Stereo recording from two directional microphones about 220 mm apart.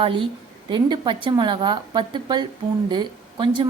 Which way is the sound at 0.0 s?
25° right (ahead or behind).